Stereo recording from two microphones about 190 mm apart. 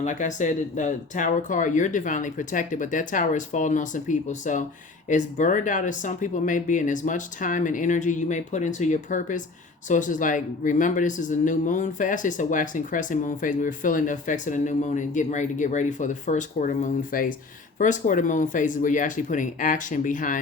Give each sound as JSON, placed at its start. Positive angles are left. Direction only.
{"t": 0.0, "sound": "speech", "side_deg": 40}